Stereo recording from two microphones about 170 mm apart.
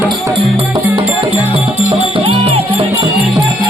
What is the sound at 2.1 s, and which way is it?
Music, 35° right (ahead or behind).